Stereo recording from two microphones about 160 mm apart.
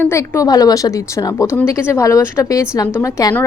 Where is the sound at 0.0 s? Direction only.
20° left (ahead or behind).